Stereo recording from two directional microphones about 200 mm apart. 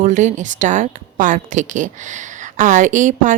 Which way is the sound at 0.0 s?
40° right (ahead or behind).